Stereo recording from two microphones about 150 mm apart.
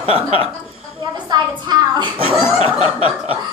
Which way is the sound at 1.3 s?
30° right (ahead or behind).